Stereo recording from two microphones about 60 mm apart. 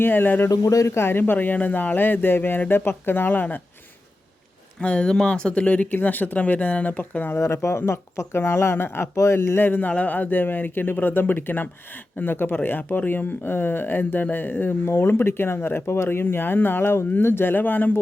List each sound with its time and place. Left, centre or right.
0.0 s speech: left
0.5 s speech: left
0.9 s speech: left
1.2 s speech: left
4.8 s speech: centre
7.3 s speech: left
9.1 s speech: left
9.6 s speech: left